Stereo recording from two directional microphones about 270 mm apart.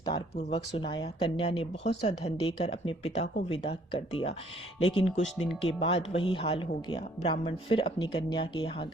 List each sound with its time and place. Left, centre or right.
0.0 s speech: centre